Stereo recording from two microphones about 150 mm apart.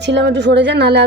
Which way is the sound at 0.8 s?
90° right.